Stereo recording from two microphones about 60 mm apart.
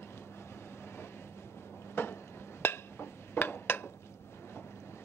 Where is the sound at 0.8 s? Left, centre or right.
Left.